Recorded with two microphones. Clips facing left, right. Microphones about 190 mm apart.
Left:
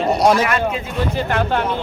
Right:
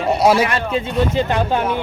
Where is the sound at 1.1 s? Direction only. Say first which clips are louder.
Right 1 dB; 15° right (ahead or behind).